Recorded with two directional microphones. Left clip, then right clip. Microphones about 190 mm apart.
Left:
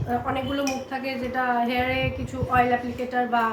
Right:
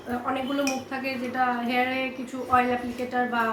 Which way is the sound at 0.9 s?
10° left (ahead or behind).